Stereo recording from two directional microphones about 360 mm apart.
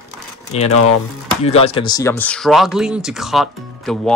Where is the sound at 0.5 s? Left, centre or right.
Centre.